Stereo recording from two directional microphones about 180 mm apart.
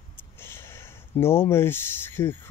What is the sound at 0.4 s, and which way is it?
Speech, 15° left (ahead or behind).